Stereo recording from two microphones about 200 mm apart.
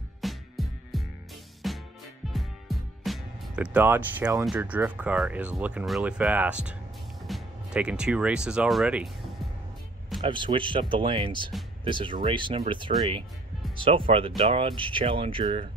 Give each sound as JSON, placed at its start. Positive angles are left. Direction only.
{"t": 0.2, "sound": "music", "side_deg": 0}
{"t": 4.5, "sound": "speech", "side_deg": -10}
{"t": 10.2, "sound": "speech", "side_deg": -25}